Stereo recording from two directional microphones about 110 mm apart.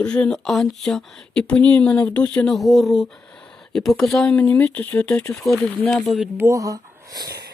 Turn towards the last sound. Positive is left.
turn(degrees=-35)  # may be behind; listen again after turning